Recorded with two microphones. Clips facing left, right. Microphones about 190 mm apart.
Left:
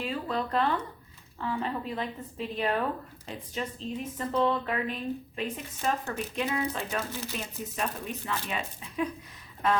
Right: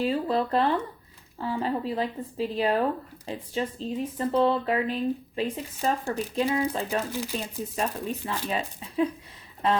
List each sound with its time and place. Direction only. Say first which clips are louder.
0.0 s speech: right 6 dB; 35° right (ahead or behind)
7.1 s speech: right 5 dB; 15° right (ahead or behind)
7.8 s speech: right 4 dB; 35° right (ahead or behind)